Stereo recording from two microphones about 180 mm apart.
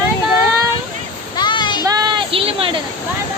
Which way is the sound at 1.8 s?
20° right (ahead or behind).